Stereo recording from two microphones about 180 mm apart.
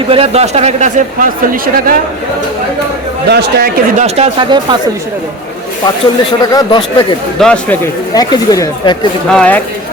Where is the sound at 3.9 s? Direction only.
35° right (ahead or behind).